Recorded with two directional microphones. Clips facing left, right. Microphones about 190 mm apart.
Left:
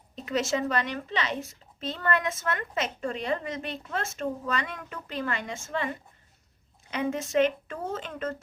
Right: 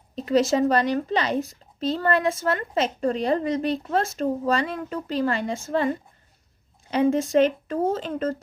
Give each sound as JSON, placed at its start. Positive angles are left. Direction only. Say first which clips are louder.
{"t": 0.2, "sound": "speech", "louder": "right 8 dB", "side_deg": -35}